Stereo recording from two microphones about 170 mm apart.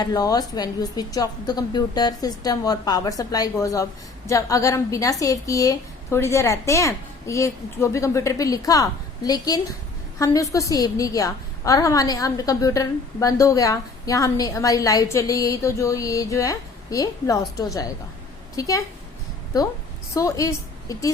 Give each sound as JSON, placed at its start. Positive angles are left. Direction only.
{"t": 0.0, "sound": "a woman's voice", "side_deg": 20}
{"t": 20.1, "sound": "a woman's voice", "side_deg": 20}